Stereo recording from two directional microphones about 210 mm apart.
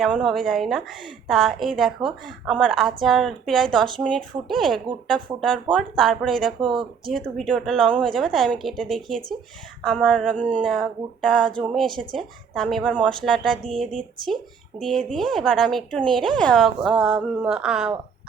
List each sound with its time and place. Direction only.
0.0 s speech: centre (ahead or behind)
6.6 s speech: 25° right (ahead or behind)
7.0 s speech: centre (ahead or behind)